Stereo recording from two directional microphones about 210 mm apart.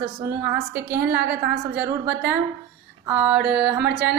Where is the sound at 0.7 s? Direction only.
50° right (ahead or behind).